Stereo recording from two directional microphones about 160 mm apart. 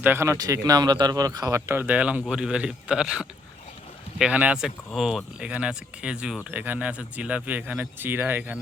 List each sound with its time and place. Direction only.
0.0 s speech: 15° right (ahead or behind)